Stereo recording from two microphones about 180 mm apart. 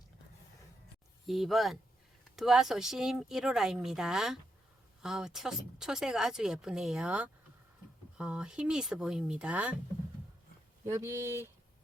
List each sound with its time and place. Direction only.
1.3 s speech: centre (ahead or behind)
10.8 s speech: 15° right (ahead or behind)